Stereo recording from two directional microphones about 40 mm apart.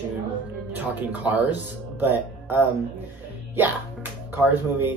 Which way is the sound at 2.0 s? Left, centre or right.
Right.